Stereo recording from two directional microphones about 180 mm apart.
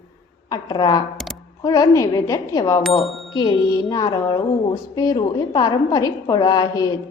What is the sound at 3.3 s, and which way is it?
A woman's voice, 20° left (ahead or behind).